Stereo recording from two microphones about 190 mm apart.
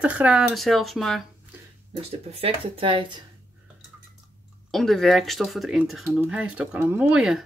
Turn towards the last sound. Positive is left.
turn(degrees=-5)  # may be behind; listen again after turning